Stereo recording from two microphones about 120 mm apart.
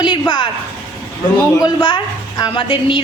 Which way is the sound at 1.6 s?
45° left (ahead or behind).